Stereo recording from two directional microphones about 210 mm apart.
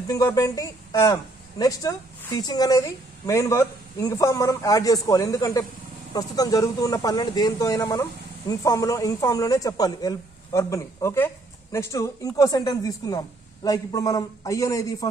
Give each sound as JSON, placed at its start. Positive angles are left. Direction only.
{"t": 0.1, "sound": "speech", "side_deg": 15}